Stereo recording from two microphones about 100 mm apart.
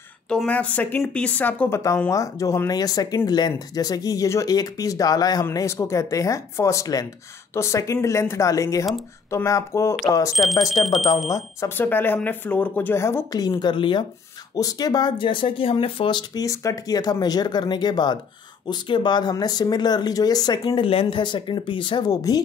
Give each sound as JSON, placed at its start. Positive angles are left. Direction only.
{"t": 0.5, "sound": "speech", "side_deg": 15}
{"t": 1.7, "sound": "speech", "side_deg": 30}
{"t": 10.3, "sound": "speech", "side_deg": 0}
{"t": 11.2, "sound": "speech", "side_deg": 35}
{"t": 11.7, "sound": "speech", "side_deg": 20}
{"t": 13.5, "sound": "speech", "side_deg": 55}
{"t": 14.5, "sound": "speech", "side_deg": 40}
{"t": 16.4, "sound": "speech", "side_deg": 35}